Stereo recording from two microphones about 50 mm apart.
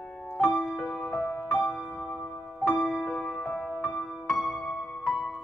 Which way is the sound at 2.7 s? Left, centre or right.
Centre.